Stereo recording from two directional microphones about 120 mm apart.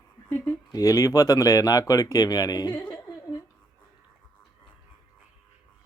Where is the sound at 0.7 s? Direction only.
30° left (ahead or behind).